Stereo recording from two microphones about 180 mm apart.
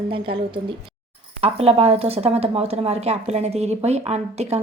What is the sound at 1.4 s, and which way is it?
A woman's voice, 35° right (ahead or behind).